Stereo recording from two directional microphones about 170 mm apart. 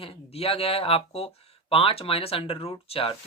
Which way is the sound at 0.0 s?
35° left (ahead or behind).